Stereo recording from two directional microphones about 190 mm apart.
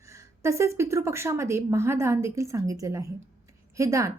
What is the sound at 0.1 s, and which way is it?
A woman's voice, 15° right (ahead or behind).